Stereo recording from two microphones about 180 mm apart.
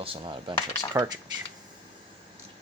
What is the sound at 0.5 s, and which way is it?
Speech, 15° left (ahead or behind).